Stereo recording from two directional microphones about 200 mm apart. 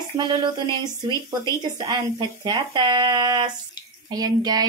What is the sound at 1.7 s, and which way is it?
A woman's voice, 20° right (ahead or behind).